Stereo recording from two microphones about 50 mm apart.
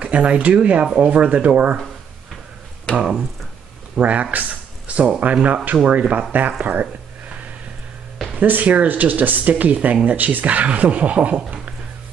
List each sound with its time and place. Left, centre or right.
0.0 s speech: right
3.0 s speech: centre
4.0 s speech: right
8.4 s speech: right